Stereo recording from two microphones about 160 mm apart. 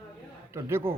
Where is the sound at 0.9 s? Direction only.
15° right (ahead or behind).